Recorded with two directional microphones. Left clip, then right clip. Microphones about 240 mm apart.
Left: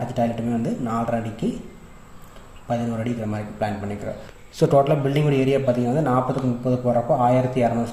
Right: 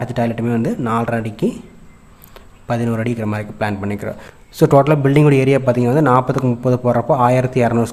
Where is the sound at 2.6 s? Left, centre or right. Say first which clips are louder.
Right 5 dB; right.